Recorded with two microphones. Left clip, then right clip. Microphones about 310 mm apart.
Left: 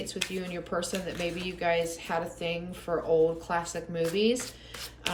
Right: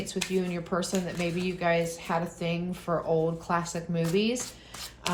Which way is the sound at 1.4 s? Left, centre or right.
Centre.